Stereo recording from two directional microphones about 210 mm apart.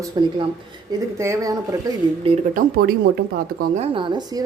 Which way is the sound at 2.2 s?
30° right (ahead or behind).